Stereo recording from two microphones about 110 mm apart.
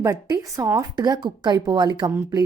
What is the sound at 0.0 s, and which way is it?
A woman's voice, 35° right (ahead or behind).